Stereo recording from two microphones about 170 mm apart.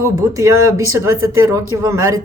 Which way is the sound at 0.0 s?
20° right (ahead or behind).